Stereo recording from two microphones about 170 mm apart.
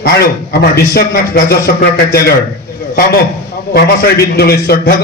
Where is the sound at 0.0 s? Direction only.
65° left (ahead or behind).